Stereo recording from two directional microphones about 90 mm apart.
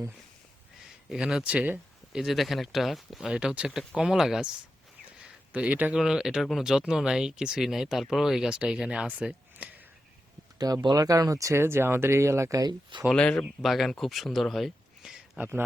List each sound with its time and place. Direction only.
1.1 s speech: 5° right (ahead or behind)
2.1 s speech: centre (ahead or behind)
5.2 s a sound: 15° right (ahead or behind)
6.0 s speech: 5° right (ahead or behind)
10.6 s speech: 50° right (ahead or behind); by 12.6 s 35° right (ahead or behind)
13.1 s speech: 10° left (ahead or behind)
13.6 s speech: centre (ahead or behind)